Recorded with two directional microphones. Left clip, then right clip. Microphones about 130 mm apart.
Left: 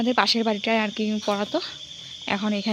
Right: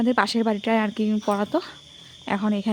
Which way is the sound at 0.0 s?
30° right (ahead or behind).